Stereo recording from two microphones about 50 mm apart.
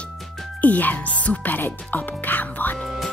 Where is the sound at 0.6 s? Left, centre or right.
Left.